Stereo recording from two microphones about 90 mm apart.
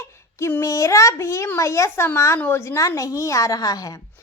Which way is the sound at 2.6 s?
35° left (ahead or behind).